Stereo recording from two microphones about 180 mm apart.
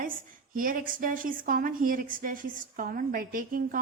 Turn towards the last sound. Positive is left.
turn(degrees=-50)  # may be behind; listen again after turning